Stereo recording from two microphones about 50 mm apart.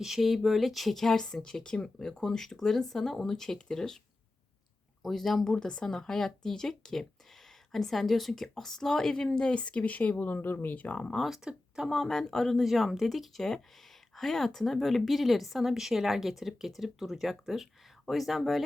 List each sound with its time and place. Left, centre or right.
0.0 s speech: centre
5.0 s speech: centre; by 11.1 s left
11.1 s speech: centre